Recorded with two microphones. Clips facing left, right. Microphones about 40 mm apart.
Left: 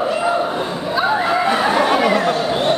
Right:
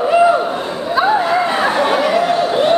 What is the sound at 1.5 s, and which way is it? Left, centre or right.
Chatter, centre.